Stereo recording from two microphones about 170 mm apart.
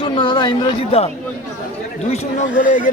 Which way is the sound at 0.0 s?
25° left (ahead or behind).